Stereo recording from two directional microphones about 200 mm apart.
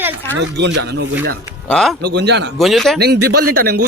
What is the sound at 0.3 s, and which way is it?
Speech, 60° right (ahead or behind).